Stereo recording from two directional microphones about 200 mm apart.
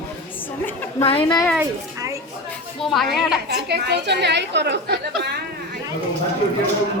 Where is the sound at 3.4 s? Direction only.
55° right (ahead or behind).